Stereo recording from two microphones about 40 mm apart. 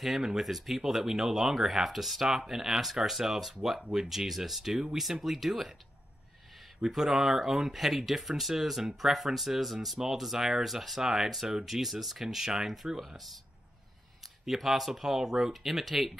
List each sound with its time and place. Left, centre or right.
0.0 s speech: centre
6.9 s speech: centre
13.0 s speech: centre
14.4 s speech: centre